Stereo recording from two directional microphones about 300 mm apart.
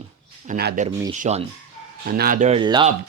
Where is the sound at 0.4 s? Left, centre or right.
Right.